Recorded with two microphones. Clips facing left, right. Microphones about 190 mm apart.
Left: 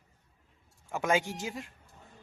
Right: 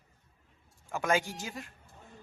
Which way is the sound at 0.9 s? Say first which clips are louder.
Left 1 dB; 20° left (ahead or behind).